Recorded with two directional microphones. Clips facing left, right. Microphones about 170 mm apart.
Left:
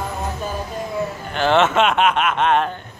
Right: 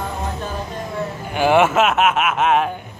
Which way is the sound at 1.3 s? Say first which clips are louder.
Right 2 dB; 10° right (ahead or behind).